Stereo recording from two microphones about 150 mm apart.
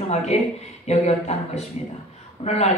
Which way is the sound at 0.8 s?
45° left (ahead or behind).